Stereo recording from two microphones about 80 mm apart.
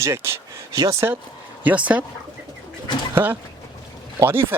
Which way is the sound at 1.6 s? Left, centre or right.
Centre.